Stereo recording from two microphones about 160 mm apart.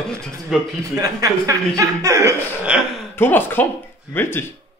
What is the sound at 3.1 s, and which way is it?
A man's voice, 15° left (ahead or behind).